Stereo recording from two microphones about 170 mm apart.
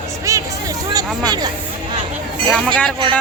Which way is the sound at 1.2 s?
25° right (ahead or behind).